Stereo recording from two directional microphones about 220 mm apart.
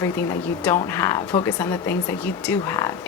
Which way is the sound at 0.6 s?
10° left (ahead or behind).